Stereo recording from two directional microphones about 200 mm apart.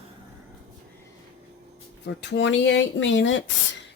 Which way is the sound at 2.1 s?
65° left (ahead or behind).